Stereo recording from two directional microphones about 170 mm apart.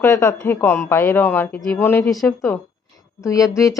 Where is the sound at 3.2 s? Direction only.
20° left (ahead or behind).